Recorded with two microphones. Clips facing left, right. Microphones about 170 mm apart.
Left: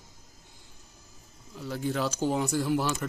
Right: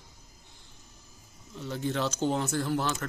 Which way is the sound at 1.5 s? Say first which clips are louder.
Left 1 dB; 5° left (ahead or behind).